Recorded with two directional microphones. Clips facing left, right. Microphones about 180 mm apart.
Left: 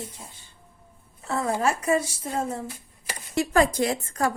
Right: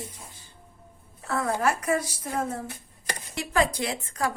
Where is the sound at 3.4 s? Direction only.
45° left (ahead or behind).